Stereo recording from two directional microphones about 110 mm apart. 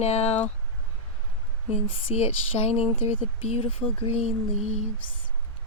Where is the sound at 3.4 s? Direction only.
70° left (ahead or behind).